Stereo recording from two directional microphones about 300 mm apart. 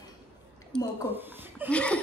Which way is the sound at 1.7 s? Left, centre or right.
Centre.